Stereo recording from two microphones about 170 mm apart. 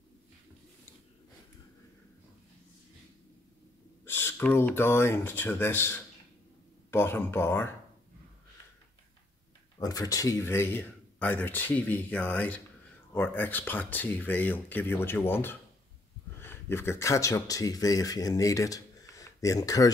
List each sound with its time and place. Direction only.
4.0 s speech: 15° left (ahead or behind)
9.8 s speech: 20° left (ahead or behind)